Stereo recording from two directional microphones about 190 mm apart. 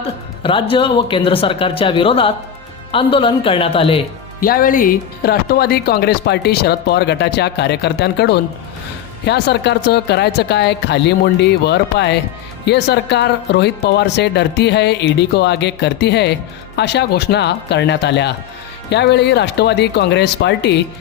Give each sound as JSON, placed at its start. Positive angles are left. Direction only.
{"t": 0.4, "sound": "speech", "side_deg": 25}
{"t": 4.4, "sound": "speech", "side_deg": 50}